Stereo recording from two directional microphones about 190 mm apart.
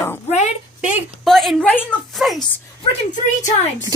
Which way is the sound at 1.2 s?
Centre (ahead or behind).